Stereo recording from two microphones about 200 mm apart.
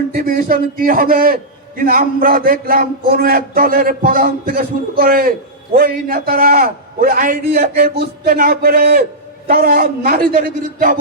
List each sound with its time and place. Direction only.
0.2 s a man's voice: 45° right (ahead or behind)